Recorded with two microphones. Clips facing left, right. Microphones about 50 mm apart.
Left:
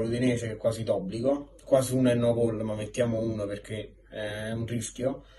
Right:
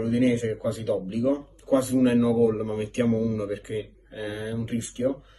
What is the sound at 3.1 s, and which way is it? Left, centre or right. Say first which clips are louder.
Speech: right 3 dB; right.